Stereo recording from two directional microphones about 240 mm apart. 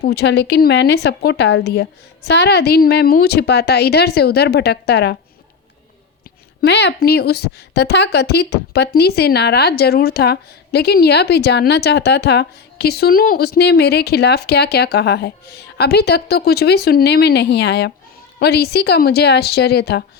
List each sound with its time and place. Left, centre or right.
0.0 s a woman's voice: left
6.6 s a woman's voice: left